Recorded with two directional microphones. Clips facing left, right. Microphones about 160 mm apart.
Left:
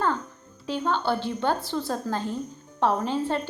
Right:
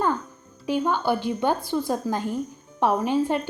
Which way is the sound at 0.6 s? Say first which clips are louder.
Right 3 dB; 15° right (ahead or behind).